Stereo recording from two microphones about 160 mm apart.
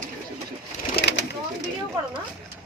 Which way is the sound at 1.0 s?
90° left.